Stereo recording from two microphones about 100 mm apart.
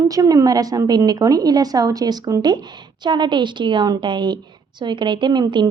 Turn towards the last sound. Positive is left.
turn(degrees=-45)  # may be behind; listen again after turning